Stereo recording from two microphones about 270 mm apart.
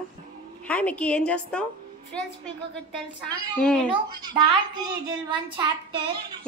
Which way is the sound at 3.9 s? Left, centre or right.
Centre.